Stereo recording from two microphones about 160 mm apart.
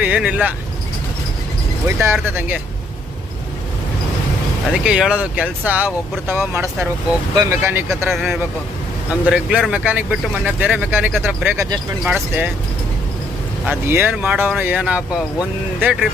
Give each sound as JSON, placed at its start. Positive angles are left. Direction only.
{"t": 0.0, "sound": "speech", "side_deg": -10}
{"t": 1.9, "sound": "speech", "side_deg": -15}
{"t": 4.7, "sound": "speech", "side_deg": -5}
{"t": 8.1, "sound": "a man's voice", "side_deg": 0}
{"t": 13.7, "sound": "speech", "side_deg": -15}